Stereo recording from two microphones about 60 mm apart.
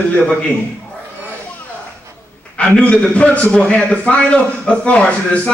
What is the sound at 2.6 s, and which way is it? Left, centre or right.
A man's voice, left.